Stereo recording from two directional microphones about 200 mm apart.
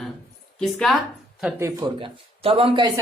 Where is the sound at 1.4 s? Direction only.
15° right (ahead or behind).